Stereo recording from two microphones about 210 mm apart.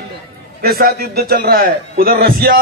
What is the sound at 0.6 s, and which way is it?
A man's voice, 45° right (ahead or behind).